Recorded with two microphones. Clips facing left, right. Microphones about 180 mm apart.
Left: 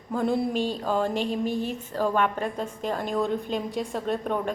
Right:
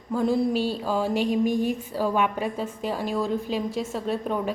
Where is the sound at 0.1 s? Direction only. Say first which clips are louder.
Right 2 dB; centre (ahead or behind).